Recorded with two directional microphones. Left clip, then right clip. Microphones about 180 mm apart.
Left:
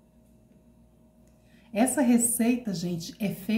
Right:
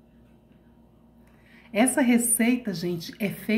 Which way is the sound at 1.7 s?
5° left (ahead or behind).